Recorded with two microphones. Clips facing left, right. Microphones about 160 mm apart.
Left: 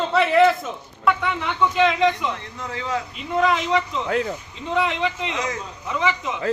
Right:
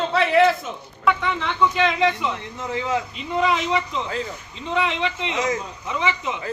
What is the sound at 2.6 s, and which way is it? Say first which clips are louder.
Speech: right 4 dB; 20° right (ahead or behind).